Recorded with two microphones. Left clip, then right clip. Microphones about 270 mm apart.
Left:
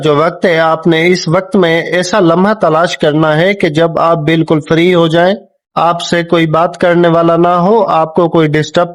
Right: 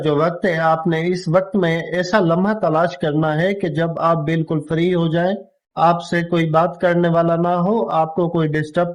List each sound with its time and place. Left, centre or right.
0.0 s speech: left